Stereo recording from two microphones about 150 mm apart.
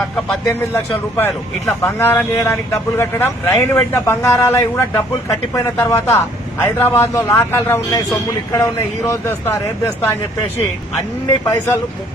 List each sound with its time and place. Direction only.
0.4 s a man's voice: 15° left (ahead or behind)
11.3 s speech: 30° left (ahead or behind)